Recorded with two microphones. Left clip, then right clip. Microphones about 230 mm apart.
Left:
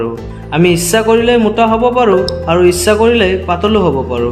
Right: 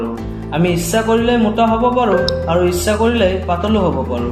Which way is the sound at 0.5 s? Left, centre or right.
Left.